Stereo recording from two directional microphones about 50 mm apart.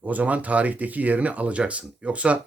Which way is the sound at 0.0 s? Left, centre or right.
Right.